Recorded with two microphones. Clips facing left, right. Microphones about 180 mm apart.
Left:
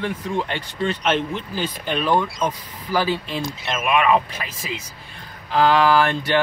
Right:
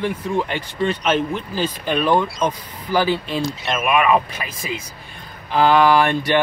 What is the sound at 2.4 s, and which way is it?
Speech, 20° right (ahead or behind).